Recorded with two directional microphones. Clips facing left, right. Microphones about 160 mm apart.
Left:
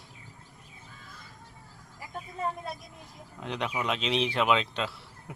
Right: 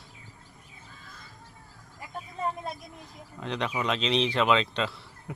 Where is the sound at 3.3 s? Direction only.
5° left (ahead or behind).